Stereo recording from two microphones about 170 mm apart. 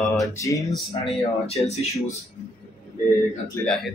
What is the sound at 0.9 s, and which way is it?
Speech, 35° left (ahead or behind).